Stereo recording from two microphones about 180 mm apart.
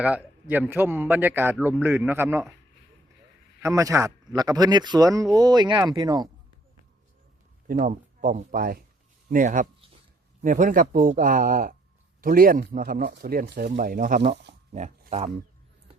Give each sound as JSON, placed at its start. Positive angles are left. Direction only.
{"t": 0.0, "sound": "a man's voice", "side_deg": -10}
{"t": 3.6, "sound": "speech", "side_deg": -15}
{"t": 7.7, "sound": "speech", "side_deg": -50}
{"t": 14.7, "sound": "speech", "side_deg": -40}